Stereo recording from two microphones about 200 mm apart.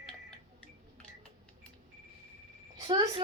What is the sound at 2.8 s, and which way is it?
Speech, 20° right (ahead or behind).